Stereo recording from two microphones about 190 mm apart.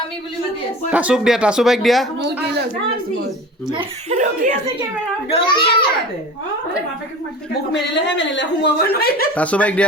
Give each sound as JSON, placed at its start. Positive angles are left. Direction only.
{"t": 0.9, "sound": "speech", "side_deg": -5}
{"t": 3.7, "sound": "speech", "side_deg": -25}
{"t": 5.3, "sound": "a child's voice", "side_deg": 25}
{"t": 7.7, "sound": "a woman's voice", "side_deg": 65}
{"t": 9.3, "sound": "speech", "side_deg": 5}